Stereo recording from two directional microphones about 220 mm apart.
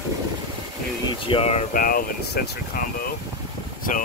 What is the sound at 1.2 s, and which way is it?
Speech, 25° left (ahead or behind).